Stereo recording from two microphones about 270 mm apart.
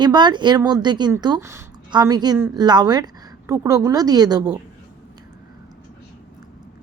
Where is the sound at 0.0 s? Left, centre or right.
Centre.